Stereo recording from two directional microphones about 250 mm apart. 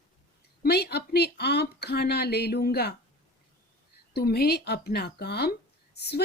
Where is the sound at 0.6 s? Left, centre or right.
Left.